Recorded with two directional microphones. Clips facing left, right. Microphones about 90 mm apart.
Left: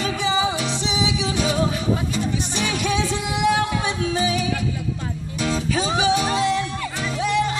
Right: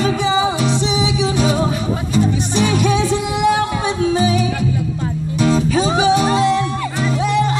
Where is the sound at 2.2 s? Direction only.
40° right (ahead or behind).